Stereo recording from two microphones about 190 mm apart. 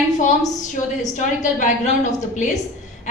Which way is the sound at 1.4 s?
40° left (ahead or behind).